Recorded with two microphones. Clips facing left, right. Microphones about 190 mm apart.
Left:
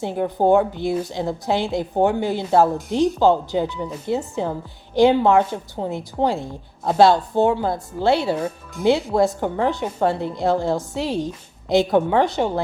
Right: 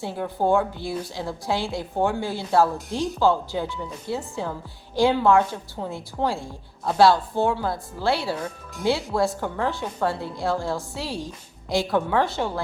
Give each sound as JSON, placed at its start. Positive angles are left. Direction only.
{"t": 0.0, "sound": "a woman's voice", "side_deg": 20}